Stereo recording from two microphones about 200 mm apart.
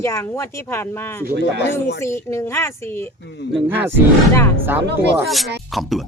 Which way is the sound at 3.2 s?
55° left (ahead or behind).